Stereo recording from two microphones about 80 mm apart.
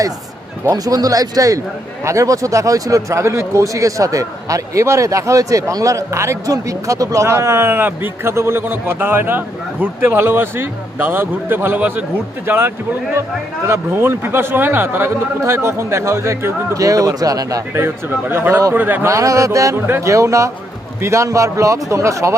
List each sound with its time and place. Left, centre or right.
0.7 s a man's voice: right
17.7 s speech: right
19.0 s speech: right
19.7 s speech: right
20.1 s speech: right